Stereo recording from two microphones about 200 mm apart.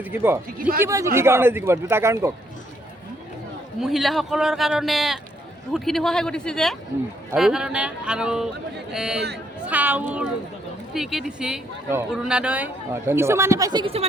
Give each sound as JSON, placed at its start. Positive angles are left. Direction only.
{"t": 0.0, "sound": "speech", "side_deg": -10}
{"t": 3.8, "sound": "speech", "side_deg": 0}